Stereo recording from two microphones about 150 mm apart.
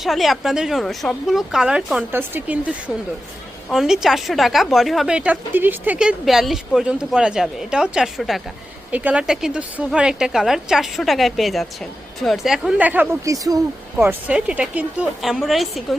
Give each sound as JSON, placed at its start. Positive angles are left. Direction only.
{"t": 0.0, "sound": "a woman's voice", "side_deg": 0}
{"t": 13.2, "sound": "speech", "side_deg": -25}
{"t": 14.0, "sound": "a woman's voice", "side_deg": -10}